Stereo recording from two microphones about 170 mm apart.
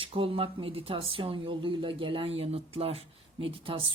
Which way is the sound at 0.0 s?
30° right (ahead or behind).